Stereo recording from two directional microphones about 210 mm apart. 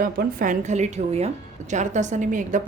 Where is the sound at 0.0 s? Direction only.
45° right (ahead or behind).